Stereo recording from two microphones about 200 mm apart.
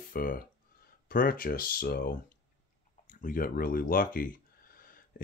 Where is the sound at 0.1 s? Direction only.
45° left (ahead or behind).